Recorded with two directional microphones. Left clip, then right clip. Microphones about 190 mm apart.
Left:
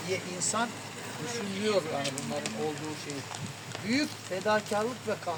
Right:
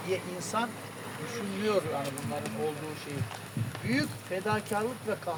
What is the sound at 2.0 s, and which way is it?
Speech, 55° right (ahead or behind).